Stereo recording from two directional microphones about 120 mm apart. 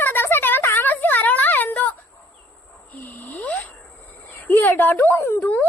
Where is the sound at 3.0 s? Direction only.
15° left (ahead or behind).